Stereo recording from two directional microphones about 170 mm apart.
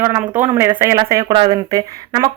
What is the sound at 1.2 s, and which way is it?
Speech, 30° right (ahead or behind).